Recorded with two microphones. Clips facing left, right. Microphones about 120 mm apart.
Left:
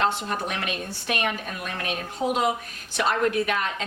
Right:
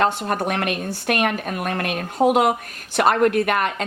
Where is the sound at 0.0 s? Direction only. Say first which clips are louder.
Right 5 dB; 50° right (ahead or behind).